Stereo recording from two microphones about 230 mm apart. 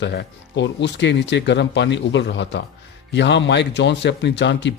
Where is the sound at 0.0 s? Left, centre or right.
Left.